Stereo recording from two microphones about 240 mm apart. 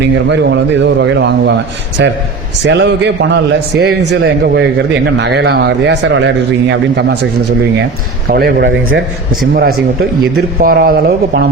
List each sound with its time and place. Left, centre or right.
0.3 s speech: right
8.3 s speech: right